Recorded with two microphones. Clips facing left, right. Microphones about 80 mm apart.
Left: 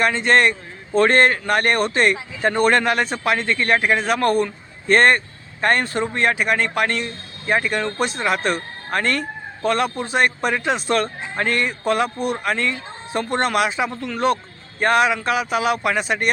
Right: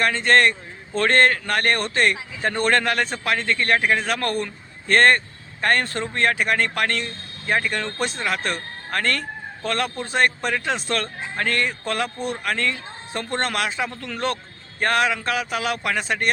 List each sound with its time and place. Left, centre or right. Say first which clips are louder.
0.0 s a man's voice: left 1 dB; centre